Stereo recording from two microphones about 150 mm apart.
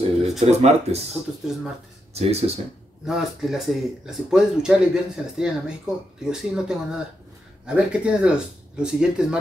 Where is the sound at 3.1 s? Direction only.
Centre (ahead or behind).